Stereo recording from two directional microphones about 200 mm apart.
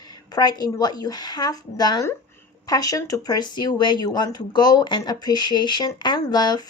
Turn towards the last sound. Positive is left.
turn(degrees=20)  # may be behind; listen again after turning